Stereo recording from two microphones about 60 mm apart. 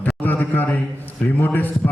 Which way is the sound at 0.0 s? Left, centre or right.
Left.